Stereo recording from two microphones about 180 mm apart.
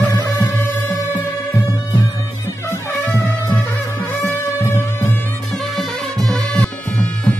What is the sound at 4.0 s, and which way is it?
Music, 15° left (ahead or behind).